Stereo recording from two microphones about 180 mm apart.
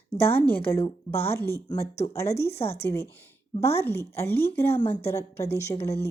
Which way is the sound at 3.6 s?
15° left (ahead or behind).